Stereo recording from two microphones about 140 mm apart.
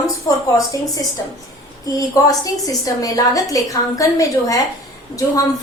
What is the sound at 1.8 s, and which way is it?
A woman's voice, 25° left (ahead or behind).